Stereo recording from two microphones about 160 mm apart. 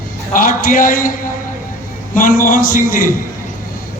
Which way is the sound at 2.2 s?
60° left (ahead or behind).